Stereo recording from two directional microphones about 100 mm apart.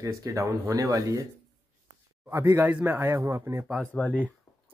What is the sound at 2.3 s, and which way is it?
A man's voice, 25° right (ahead or behind).